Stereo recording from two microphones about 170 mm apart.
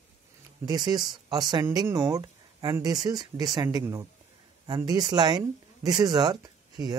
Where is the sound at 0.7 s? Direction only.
25° right (ahead or behind).